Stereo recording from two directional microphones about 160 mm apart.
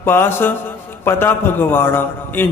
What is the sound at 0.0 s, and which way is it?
A man's voice, 15° left (ahead or behind).